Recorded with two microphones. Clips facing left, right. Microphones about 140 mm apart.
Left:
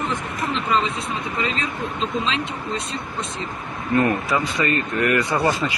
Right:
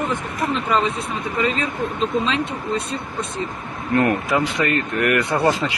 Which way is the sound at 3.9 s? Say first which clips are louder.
Right 1 dB; 60° right (ahead or behind).